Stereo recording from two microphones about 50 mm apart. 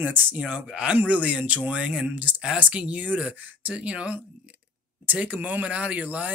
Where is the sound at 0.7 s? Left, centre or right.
Right.